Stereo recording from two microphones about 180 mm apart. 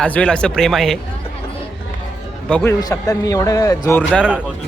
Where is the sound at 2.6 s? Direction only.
20° left (ahead or behind).